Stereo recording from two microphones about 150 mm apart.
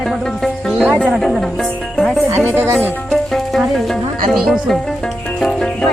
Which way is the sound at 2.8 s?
10° left (ahead or behind).